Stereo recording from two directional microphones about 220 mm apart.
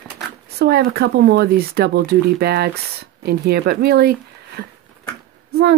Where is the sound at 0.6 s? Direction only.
45° right (ahead or behind).